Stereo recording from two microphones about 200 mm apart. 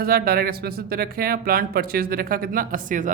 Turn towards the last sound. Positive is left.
turn(degrees=-40)  # may be behind; listen again after turning